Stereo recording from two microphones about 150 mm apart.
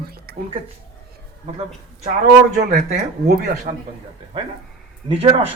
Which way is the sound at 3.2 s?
85° right.